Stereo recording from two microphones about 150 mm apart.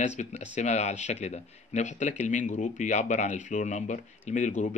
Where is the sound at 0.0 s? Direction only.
50° left (ahead or behind).